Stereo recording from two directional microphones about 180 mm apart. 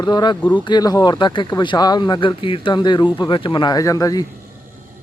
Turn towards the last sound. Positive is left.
turn(degrees=20)  # may be behind; listen again after turning